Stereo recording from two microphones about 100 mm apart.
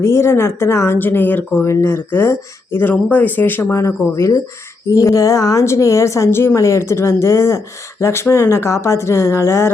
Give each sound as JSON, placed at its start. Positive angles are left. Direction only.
{"t": 0.0, "sound": "speech", "side_deg": 25}